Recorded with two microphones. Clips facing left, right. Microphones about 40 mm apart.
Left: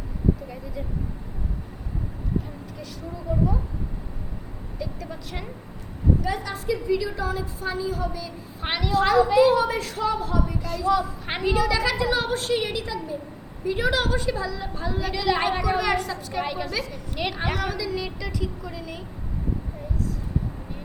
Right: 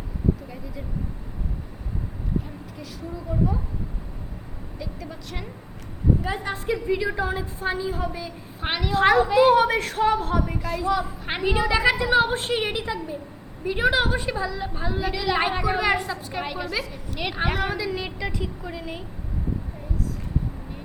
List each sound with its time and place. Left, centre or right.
3.3 s a woman's voice: centre
4.8 s a woman's voice: centre
6.2 s a woman's voice: right
8.6 s a woman's voice: centre
8.9 s a woman's voice: right
10.9 s a woman's voice: centre
11.4 s a woman's voice: right
15.1 s a woman's voice: centre
15.6 s a woman's voice: right
16.4 s a woman's voice: centre; by 19.0 s right